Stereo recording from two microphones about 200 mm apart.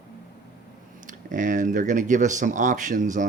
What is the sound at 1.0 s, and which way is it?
Speech, 40° right (ahead or behind).